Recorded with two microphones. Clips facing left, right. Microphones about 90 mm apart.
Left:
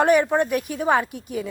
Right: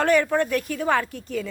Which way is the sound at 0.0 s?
15° left (ahead or behind).